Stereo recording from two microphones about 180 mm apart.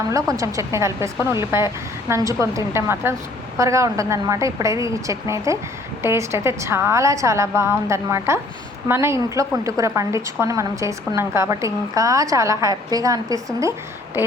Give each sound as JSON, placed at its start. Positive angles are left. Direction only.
{"t": 0.1, "sound": "a woman's voice", "side_deg": -15}